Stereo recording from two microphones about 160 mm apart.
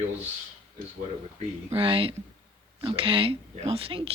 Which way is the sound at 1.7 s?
35° right (ahead or behind).